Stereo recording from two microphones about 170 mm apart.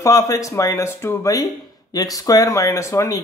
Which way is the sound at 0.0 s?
20° left (ahead or behind).